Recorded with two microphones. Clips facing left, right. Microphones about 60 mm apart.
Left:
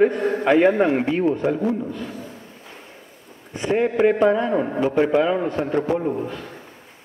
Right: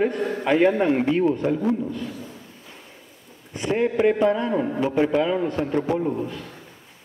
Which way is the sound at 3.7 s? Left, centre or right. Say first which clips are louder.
Left 2 dB; centre.